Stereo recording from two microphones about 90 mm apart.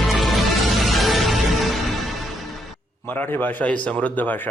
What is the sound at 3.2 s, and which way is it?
A man's voice, 15° left (ahead or behind).